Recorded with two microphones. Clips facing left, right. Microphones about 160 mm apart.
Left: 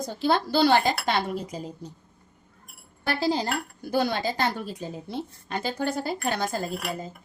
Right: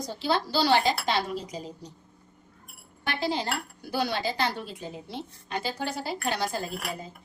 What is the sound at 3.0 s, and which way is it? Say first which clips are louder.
Speech: left 4 dB; 35° left (ahead or behind).